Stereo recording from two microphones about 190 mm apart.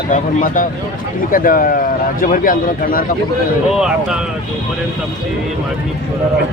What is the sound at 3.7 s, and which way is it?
Speech, 5° right (ahead or behind).